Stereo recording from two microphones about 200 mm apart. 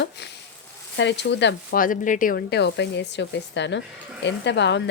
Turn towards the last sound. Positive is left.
turn(degrees=60)  # may be behind; listen again after turning